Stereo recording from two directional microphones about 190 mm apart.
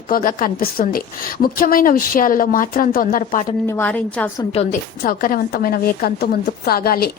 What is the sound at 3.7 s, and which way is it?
Speech, 10° left (ahead or behind).